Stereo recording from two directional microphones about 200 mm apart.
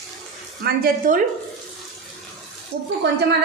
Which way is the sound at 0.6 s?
50° right (ahead or behind).